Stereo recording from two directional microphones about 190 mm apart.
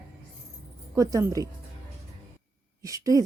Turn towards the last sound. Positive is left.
turn(degrees=-15)  # may be behind; listen again after turning